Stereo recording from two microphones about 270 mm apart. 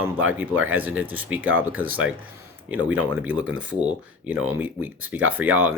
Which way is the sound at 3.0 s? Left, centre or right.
Centre.